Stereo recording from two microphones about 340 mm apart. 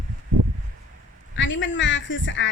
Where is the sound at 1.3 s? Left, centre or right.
Left.